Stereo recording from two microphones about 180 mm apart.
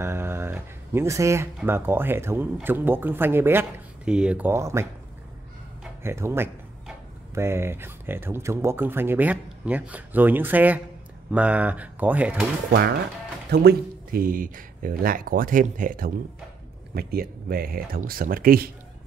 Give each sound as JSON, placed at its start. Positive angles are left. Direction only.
{"t": 0.0, "sound": "a sound", "side_deg": -15}
{"t": 1.6, "sound": "speech", "side_deg": -10}
{"t": 6.0, "sound": "speech", "side_deg": -15}
{"t": 13.5, "sound": "speech", "side_deg": -60}